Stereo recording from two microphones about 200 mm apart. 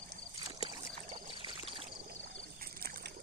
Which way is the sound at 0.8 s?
25° right (ahead or behind).